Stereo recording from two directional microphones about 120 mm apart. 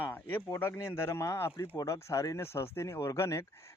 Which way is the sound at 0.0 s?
15° left (ahead or behind).